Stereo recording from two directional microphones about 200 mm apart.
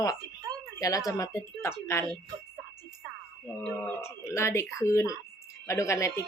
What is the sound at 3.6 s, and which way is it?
Speech, 10° left (ahead or behind).